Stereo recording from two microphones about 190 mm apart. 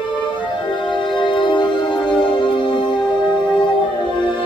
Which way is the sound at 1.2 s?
25° left (ahead or behind).